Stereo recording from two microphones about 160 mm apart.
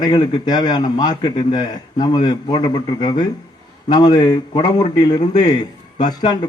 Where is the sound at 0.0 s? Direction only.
25° left (ahead or behind).